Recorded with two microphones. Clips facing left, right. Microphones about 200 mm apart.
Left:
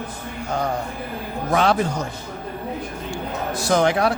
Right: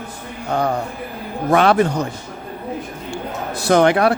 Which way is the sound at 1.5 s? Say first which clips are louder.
Right 5 dB; 65° right (ahead or behind).